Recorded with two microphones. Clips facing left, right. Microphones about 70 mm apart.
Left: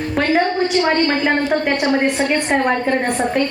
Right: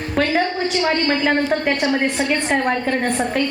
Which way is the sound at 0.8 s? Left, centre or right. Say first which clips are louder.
Left 1 dB; left.